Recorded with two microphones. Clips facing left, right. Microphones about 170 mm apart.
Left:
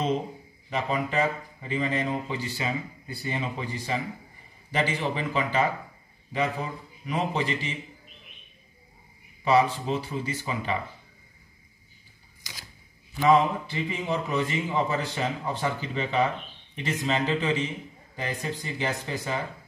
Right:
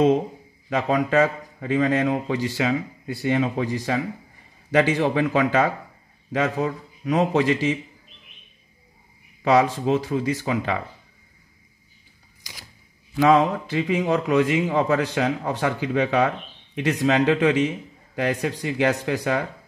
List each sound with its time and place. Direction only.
0.7 s speech: 90° right
9.4 s speech: 80° right
13.2 s a man's voice: 80° right